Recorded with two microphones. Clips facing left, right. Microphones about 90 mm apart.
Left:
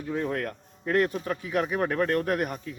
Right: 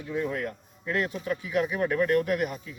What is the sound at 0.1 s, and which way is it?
A man's voice, 50° left (ahead or behind).